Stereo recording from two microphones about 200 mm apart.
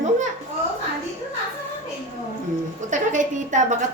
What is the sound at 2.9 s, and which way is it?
Speech, 40° right (ahead or behind).